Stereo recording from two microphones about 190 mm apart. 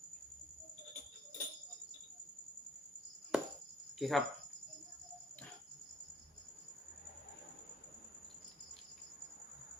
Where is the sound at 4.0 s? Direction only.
Centre (ahead or behind).